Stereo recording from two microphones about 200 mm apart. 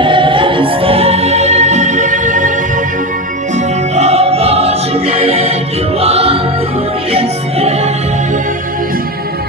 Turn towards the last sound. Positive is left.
turn(degrees=-30)  # may be behind; listen again after turning